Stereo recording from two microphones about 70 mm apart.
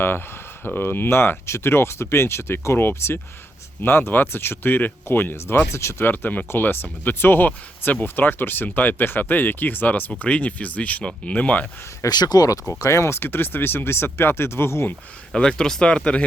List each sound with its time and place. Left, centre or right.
0.0 s speech: left
6.1 s speech: left
12.0 s speech: left
12.8 s speech: left
15.3 s speech: centre